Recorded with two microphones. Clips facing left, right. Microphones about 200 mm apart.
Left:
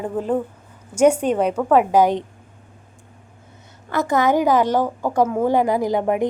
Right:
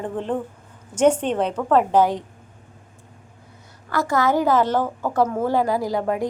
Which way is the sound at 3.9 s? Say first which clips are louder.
Left 2 dB; 20° left (ahead or behind).